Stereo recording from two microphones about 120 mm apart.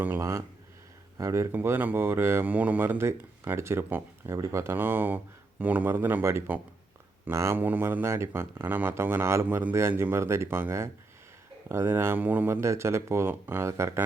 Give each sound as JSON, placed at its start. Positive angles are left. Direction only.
{"t": 0.0, "sound": "speech", "side_deg": -20}